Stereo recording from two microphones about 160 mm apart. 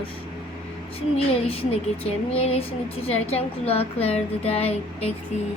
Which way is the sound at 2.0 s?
40° left (ahead or behind).